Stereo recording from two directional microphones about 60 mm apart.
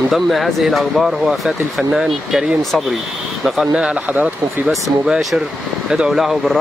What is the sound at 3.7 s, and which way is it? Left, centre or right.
Speech, centre.